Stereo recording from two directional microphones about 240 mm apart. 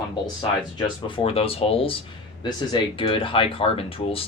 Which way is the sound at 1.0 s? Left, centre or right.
Left.